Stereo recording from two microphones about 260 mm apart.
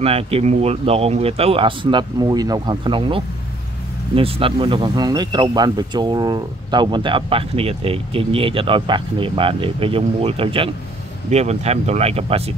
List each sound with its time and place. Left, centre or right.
0.0 s speech: right